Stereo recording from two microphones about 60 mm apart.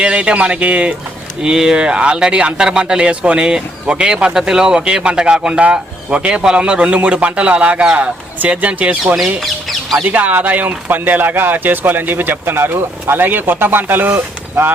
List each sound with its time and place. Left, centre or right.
0.0 s speech: centre
9.1 s speech: centre
10.1 s speech: right